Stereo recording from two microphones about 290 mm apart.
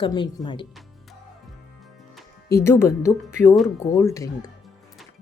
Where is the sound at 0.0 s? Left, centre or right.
Centre.